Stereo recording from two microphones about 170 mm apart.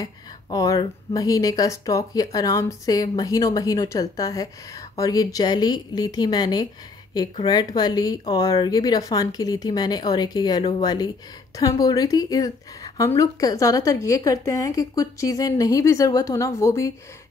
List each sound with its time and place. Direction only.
0.0 s speech: 20° left (ahead or behind)